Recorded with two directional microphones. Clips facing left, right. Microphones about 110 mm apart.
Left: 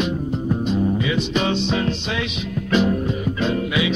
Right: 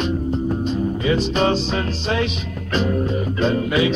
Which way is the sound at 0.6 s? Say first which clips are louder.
Left 1 dB; 35° right (ahead or behind).